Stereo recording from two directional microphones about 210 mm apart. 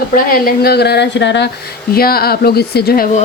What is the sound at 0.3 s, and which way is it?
Speech, 45° left (ahead or behind).